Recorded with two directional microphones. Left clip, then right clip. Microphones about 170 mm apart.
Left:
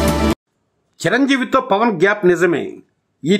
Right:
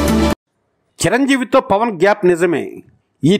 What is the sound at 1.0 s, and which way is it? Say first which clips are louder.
Speech: right 1 dB; 40° right (ahead or behind).